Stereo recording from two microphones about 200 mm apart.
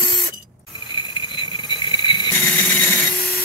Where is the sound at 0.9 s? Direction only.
25° left (ahead or behind).